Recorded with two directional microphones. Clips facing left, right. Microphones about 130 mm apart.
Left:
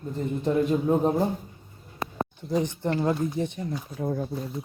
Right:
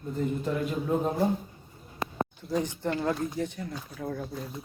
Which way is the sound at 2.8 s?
20° left (ahead or behind).